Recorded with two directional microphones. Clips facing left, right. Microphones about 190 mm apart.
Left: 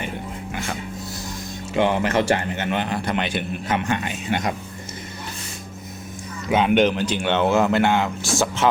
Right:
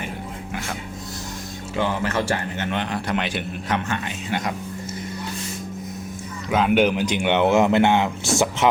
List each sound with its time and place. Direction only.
1.7 s speech: 20° left (ahead or behind)
2.6 s a man's voice: 5° left (ahead or behind)
6.5 s speech: centre (ahead or behind); by 8.6 s 20° right (ahead or behind)